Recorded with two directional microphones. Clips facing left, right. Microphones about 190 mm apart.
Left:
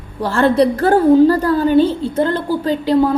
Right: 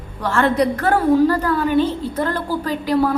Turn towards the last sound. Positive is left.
turn(degrees=25)  # may be behind; listen again after turning